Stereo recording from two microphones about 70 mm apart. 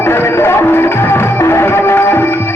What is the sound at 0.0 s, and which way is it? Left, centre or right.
Music, left.